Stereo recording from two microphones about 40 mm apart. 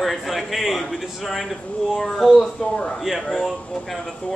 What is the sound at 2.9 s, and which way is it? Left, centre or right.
A man's voice, centre.